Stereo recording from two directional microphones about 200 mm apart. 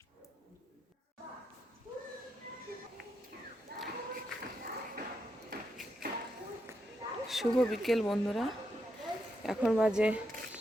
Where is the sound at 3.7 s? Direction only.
50° right (ahead or behind).